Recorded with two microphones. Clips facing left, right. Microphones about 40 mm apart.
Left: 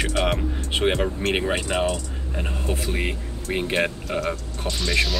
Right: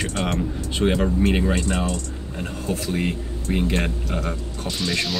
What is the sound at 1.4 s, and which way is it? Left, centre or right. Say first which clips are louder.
Speech: even; centre.